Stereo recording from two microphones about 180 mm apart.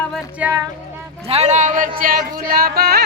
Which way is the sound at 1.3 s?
40° right (ahead or behind).